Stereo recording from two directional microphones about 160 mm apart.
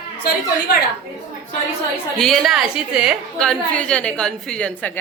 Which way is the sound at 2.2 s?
Centre (ahead or behind).